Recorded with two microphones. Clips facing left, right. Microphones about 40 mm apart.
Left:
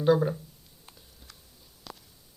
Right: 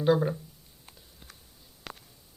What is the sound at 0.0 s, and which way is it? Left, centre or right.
Speech, centre.